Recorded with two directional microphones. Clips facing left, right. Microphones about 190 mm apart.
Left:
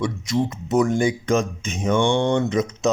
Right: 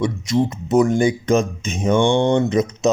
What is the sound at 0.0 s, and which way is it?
Speech, 25° right (ahead or behind).